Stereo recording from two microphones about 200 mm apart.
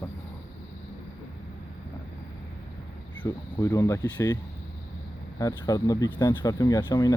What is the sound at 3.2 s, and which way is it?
Speech, 15° left (ahead or behind).